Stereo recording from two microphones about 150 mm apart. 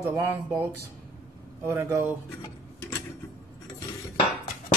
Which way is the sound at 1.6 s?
20° right (ahead or behind).